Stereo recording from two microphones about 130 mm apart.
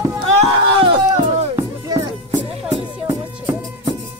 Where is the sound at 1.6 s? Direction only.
25° right (ahead or behind).